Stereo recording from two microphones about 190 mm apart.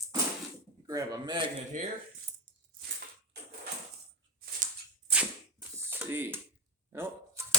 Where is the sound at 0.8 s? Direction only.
20° right (ahead or behind).